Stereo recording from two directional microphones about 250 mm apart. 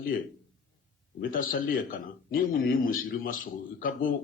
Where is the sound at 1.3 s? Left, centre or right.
Left.